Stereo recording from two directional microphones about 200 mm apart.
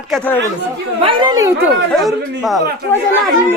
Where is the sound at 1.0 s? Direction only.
25° right (ahead or behind).